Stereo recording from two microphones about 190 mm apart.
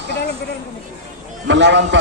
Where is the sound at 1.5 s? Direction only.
70° right (ahead or behind).